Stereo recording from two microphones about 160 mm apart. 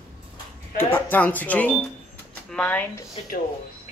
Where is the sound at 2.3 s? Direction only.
5° left (ahead or behind).